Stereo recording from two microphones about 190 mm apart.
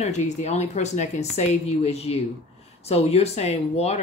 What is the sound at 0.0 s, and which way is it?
Speech, 35° left (ahead or behind).